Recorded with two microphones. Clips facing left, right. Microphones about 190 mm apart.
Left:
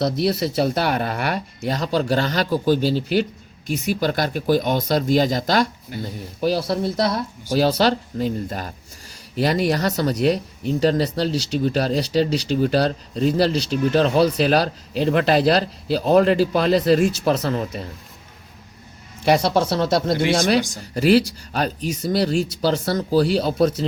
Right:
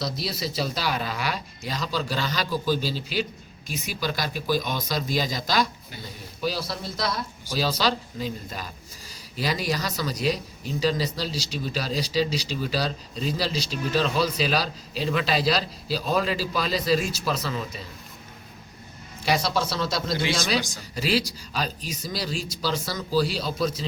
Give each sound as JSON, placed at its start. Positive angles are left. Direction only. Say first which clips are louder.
{"t": 0.0, "sound": "a man's voice", "louder": "left 10 dB", "side_deg": 60}
{"t": 19.2, "sound": "a man's voice", "louder": "left 7 dB", "side_deg": 60}